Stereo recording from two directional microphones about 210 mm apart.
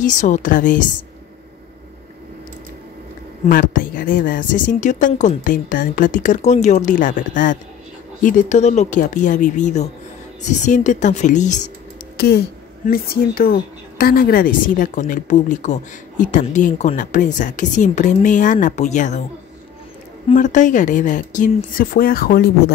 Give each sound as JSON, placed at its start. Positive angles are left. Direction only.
{"t": 0.0, "sound": "speech", "side_deg": 35}
{"t": 3.4, "sound": "speech", "side_deg": 40}
{"t": 12.2, "sound": "speech", "side_deg": 50}
{"t": 20.3, "sound": "speech", "side_deg": 35}